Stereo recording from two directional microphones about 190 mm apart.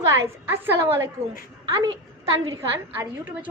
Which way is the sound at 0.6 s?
10° right (ahead or behind).